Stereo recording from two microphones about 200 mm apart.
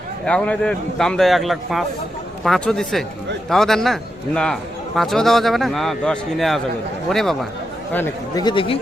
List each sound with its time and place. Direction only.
0.3 s a man's voice: 5° left (ahead or behind)
8.4 s speech: 25° left (ahead or behind)